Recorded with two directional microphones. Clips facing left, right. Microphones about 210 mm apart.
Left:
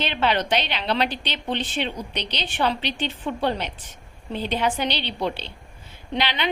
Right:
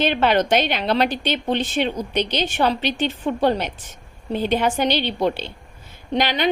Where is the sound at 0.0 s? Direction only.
45° right (ahead or behind).